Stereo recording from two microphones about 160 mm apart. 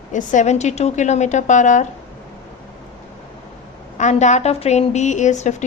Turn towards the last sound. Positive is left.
turn(degrees=50)  # may be behind; listen again after turning